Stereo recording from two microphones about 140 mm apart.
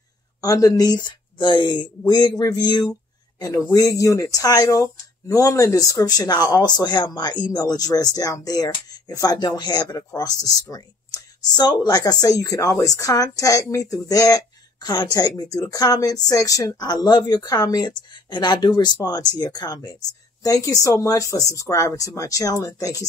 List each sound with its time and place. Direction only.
0.4 s speech: 25° left (ahead or behind)